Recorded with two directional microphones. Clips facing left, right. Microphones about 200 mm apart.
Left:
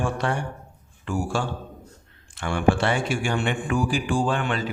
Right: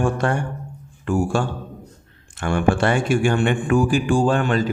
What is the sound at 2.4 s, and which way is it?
Speech, 50° right (ahead or behind).